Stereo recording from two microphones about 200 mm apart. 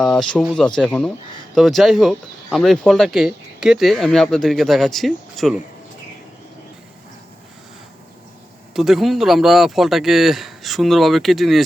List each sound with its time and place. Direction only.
0.0 s speech: centre (ahead or behind)
8.7 s speech: centre (ahead or behind)